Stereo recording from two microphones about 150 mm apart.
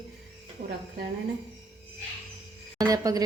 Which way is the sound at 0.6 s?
50° right (ahead or behind).